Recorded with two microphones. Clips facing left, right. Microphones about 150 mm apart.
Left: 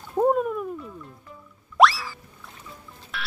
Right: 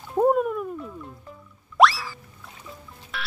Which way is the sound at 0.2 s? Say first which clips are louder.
Right 1 dB; 5° right (ahead or behind).